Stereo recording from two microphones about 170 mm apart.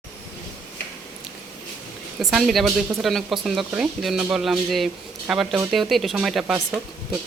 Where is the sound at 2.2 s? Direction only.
Centre (ahead or behind).